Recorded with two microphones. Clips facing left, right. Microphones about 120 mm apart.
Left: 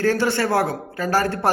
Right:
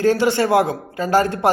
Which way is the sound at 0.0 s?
15° right (ahead or behind).